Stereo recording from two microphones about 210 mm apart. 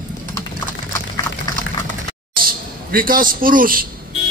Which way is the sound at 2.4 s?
40° right (ahead or behind).